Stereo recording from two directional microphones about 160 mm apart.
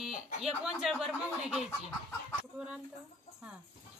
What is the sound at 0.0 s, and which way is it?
Speech, 5° right (ahead or behind).